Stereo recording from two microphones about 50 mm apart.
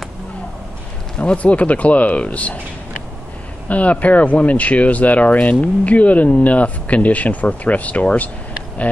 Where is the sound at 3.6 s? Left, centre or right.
Left.